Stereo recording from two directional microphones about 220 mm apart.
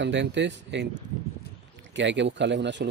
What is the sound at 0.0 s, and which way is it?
Speech, 55° right (ahead or behind).